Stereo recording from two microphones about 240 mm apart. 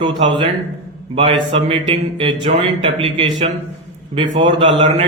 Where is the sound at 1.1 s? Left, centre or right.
Right.